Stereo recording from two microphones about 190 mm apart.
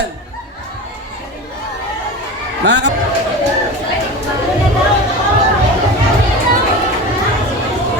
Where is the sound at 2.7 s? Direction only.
65° right (ahead or behind).